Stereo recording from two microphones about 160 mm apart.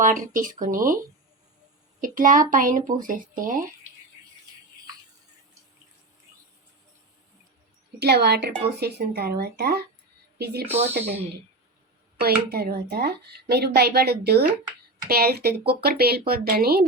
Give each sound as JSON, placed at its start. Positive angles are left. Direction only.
{"t": 0.0, "sound": "speech", "side_deg": -55}
{"t": 2.0, "sound": "speech", "side_deg": -55}
{"t": 7.9, "sound": "a woman's voice", "side_deg": -90}
{"t": 10.3, "sound": "speech", "side_deg": -90}
{"t": 10.8, "sound": "speech", "side_deg": -40}
{"t": 12.2, "sound": "speech", "side_deg": -80}
{"t": 15.0, "sound": "speech", "side_deg": -70}